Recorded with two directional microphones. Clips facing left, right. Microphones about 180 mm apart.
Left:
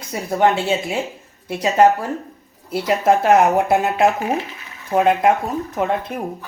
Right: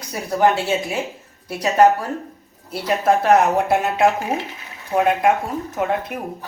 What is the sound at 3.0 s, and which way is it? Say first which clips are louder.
Speech: left 1 dB; 25° left (ahead or behind).